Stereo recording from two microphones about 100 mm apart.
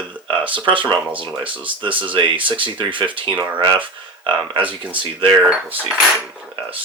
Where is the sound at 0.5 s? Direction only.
55° right (ahead or behind).